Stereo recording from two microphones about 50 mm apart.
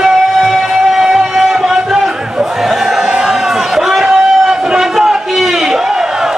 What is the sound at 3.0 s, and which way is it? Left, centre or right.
Crowd, centre.